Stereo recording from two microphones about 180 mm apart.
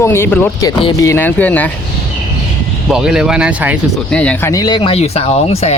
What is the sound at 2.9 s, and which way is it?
Speech, 5° right (ahead or behind).